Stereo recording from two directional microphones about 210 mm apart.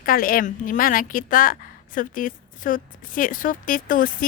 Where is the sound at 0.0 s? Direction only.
45° left (ahead or behind).